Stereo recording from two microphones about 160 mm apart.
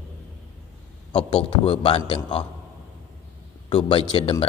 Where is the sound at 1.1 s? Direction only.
35° left (ahead or behind).